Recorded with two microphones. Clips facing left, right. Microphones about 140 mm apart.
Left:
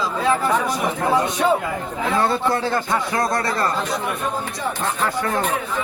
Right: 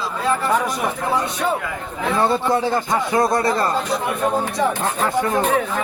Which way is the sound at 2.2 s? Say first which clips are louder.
Right 2 dB; 15° right (ahead or behind).